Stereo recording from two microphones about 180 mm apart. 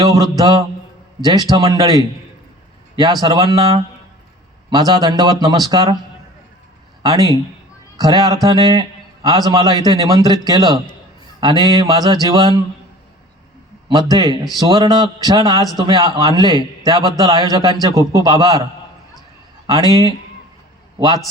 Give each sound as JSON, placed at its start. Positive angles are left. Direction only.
{"t": 0.0, "sound": "a man's voice", "side_deg": -20}
{"t": 7.0, "sound": "a man's voice", "side_deg": -20}
{"t": 13.8, "sound": "a man's voice", "side_deg": -20}
{"t": 19.9, "sound": "a man's voice", "side_deg": -20}